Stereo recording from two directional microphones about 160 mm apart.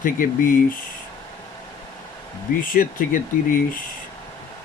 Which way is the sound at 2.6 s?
60° left (ahead or behind).